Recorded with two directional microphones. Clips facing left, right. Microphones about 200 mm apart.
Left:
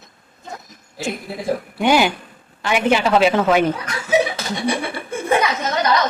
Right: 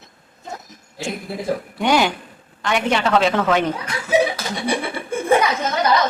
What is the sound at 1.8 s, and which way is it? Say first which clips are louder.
Speech: left 2 dB; 5° left (ahead or behind).